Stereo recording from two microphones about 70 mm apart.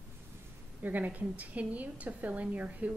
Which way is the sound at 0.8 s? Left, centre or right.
Right.